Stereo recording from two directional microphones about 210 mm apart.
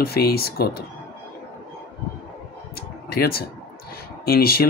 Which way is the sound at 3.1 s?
45° left (ahead or behind).